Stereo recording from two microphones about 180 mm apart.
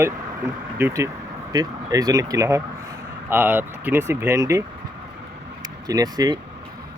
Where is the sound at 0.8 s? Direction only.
15° right (ahead or behind).